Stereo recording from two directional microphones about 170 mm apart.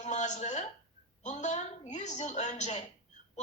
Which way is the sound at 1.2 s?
45° left (ahead or behind).